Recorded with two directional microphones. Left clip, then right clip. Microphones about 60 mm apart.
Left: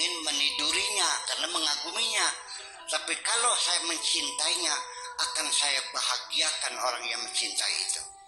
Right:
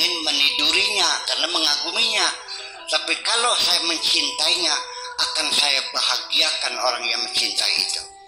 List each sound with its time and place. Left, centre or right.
0.0 s music: right
0.7 s a sound: right
2.9 s music: right